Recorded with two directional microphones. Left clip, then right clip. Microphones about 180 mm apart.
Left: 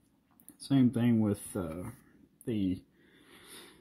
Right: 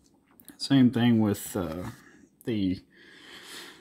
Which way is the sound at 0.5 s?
20° right (ahead or behind).